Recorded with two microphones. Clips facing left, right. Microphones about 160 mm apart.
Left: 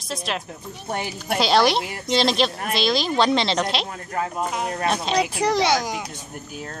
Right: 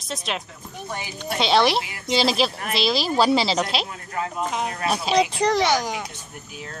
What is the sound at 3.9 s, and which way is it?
Speech, 40° left (ahead or behind).